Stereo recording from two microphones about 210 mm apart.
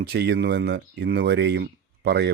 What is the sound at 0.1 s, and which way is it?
Speech, 50° right (ahead or behind).